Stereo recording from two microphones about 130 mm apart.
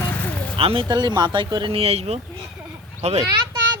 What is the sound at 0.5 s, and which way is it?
Speech, 45° right (ahead or behind).